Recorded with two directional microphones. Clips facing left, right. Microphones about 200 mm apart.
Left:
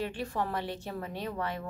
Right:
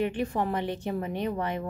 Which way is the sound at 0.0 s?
20° right (ahead or behind).